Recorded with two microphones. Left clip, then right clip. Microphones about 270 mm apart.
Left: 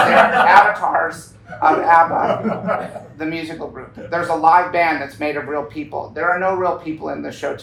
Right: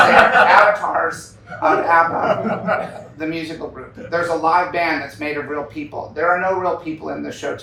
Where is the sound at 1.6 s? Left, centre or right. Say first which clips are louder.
Left 2 dB; centre.